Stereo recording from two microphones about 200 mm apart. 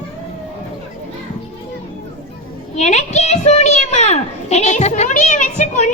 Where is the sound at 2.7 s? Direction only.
35° left (ahead or behind).